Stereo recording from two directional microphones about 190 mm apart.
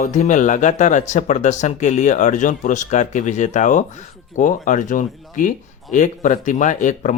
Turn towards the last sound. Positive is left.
turn(degrees=40)  # may be behind; listen again after turning